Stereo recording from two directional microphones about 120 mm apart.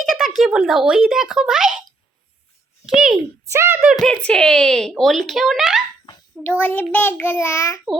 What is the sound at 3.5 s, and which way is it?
Speech, 20° right (ahead or behind).